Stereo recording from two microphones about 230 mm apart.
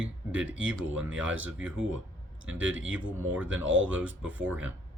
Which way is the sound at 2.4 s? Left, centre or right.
Right.